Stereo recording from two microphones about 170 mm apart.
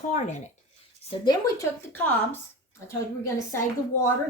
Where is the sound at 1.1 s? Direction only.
25° left (ahead or behind).